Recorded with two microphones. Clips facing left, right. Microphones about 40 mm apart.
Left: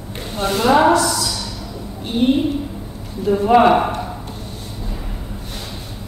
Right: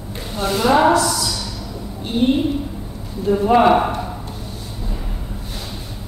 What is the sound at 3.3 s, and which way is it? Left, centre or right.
Speech, centre.